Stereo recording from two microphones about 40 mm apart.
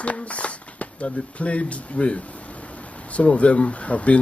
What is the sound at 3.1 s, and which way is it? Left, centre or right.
Speech, left.